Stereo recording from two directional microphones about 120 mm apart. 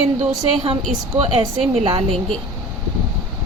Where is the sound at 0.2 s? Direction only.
50° right (ahead or behind).